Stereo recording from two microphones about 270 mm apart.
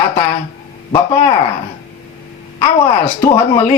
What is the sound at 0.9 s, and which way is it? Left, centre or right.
Speech, centre.